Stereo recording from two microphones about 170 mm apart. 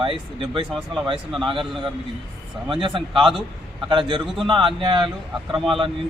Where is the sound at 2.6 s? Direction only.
30° right (ahead or behind).